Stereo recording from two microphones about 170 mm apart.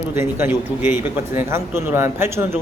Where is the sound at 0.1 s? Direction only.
15° right (ahead or behind).